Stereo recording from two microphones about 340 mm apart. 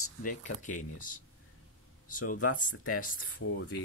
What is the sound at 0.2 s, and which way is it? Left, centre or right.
Speech, left.